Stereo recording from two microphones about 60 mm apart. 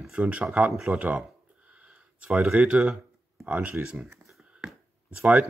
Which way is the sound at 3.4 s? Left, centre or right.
Right.